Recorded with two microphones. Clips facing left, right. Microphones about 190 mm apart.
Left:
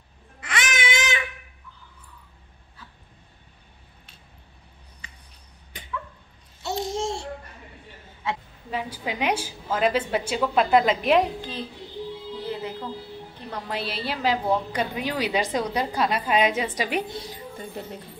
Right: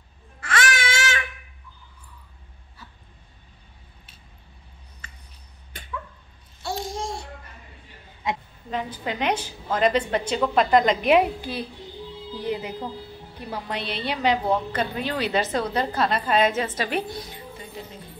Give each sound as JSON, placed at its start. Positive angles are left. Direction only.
{"t": 0.4, "sound": "a sound", "side_deg": 20}
{"t": 6.6, "sound": "babbling", "side_deg": 25}
{"t": 8.2, "sound": "a woman's voice", "side_deg": -15}
{"t": 8.6, "sound": "a woman's voice", "side_deg": 10}
{"t": 12.4, "sound": "music", "side_deg": -15}
{"t": 13.4, "sound": "a woman's voice", "side_deg": -5}
{"t": 14.7, "sound": "a woman's voice", "side_deg": 15}